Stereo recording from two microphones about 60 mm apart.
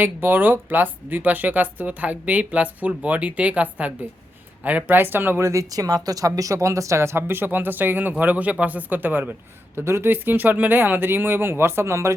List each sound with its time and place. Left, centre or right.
0.0 s speech: right
5.4 s speech: right
9.7 s speech: right